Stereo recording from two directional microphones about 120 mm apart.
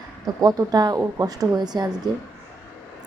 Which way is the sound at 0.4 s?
35° right (ahead or behind).